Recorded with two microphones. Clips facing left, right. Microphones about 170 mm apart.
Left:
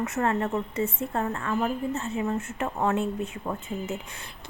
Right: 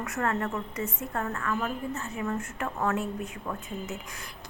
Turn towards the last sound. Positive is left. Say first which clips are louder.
# left 4 dB
turn(degrees=25)  # may be behind; listen again after turning